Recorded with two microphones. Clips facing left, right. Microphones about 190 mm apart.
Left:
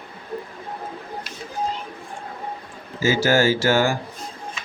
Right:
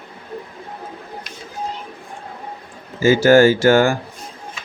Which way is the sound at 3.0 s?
55° right (ahead or behind).